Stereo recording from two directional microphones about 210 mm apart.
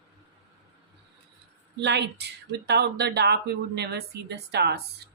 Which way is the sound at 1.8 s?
55° right (ahead or behind).